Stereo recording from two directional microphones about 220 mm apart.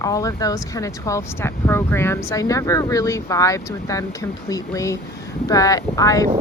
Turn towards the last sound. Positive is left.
turn(degrees=15)  # may be behind; listen again after turning